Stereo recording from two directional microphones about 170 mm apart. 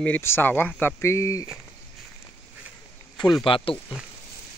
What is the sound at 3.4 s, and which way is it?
Speech, 30° left (ahead or behind).